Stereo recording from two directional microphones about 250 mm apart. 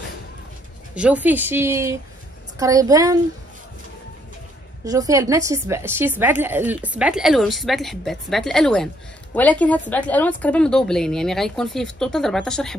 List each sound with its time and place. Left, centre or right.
0.9 s speech: centre
4.8 s a woman's voice: centre